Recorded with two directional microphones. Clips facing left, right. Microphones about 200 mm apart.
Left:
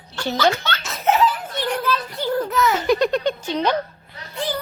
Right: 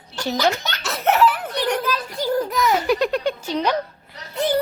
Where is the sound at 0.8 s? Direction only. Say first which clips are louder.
Right 2 dB; 70° right (ahead or behind).